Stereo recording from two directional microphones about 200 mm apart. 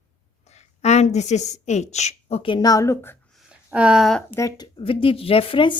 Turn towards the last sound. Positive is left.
turn(degrees=25)  # may be behind; listen again after turning